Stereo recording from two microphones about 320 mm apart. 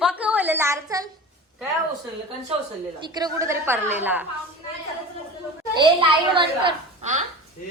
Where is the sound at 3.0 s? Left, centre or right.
Centre.